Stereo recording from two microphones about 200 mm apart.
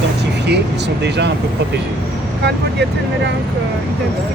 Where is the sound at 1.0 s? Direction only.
60° right (ahead or behind).